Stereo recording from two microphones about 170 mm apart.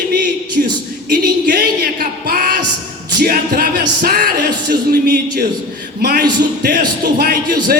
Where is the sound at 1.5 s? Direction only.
65° right (ahead or behind).